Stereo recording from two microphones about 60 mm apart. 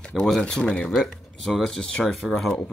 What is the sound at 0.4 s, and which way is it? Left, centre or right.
Speech, centre.